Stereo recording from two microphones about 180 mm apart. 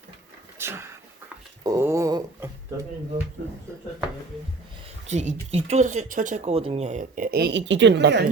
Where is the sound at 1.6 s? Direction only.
15° right (ahead or behind).